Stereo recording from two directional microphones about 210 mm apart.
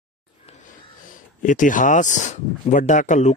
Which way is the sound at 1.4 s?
40° left (ahead or behind).